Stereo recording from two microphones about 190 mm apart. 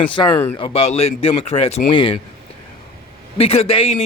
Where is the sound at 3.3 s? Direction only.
30° left (ahead or behind).